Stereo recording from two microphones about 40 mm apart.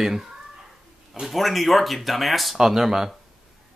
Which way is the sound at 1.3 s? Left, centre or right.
Centre.